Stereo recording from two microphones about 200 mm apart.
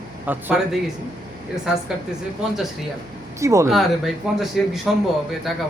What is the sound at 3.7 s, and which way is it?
Speech, centre (ahead or behind).